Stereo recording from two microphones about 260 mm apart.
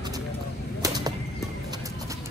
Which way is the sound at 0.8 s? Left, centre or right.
Centre.